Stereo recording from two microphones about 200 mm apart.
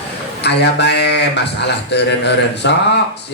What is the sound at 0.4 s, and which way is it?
A man's voice, 55° left (ahead or behind).